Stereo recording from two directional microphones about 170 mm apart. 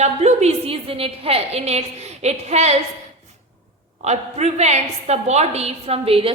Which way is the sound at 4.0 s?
40° right (ahead or behind).